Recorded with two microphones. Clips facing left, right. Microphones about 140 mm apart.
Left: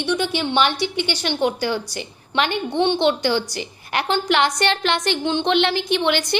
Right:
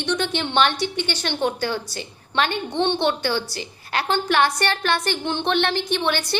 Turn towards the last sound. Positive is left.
turn(degrees=15)  # may be behind; listen again after turning